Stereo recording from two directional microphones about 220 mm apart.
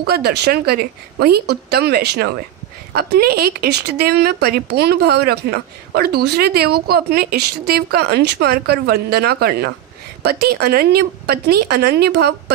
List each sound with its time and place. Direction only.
0.0 s speech: 45° right (ahead or behind)